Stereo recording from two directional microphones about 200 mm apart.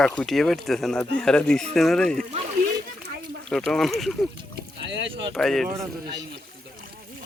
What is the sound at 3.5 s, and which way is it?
Speech, 5° left (ahead or behind).